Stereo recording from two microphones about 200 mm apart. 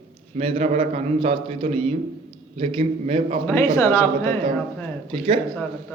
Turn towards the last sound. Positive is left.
turn(degrees=-25)  # may be behind; listen again after turning